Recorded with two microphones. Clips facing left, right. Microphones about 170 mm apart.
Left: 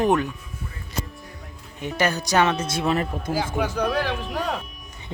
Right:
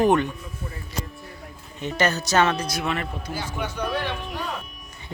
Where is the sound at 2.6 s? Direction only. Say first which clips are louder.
Left 4 dB; 25° left (ahead or behind).